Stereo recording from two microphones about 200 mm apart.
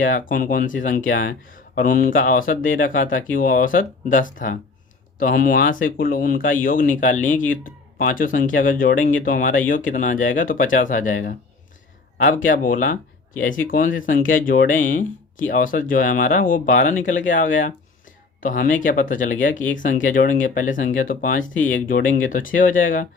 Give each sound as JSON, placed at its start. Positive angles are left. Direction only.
{"t": 0.0, "sound": "speech", "side_deg": 45}